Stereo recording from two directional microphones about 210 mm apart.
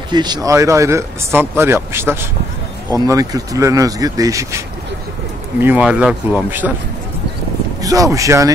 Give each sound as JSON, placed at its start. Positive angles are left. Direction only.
{"t": 0.1, "sound": "speech", "side_deg": -20}
{"t": 5.6, "sound": "speech", "side_deg": -5}
{"t": 7.8, "sound": "speech", "side_deg": -15}